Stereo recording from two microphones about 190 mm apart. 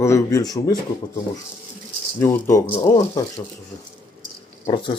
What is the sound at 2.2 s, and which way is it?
Speech, 15° left (ahead or behind).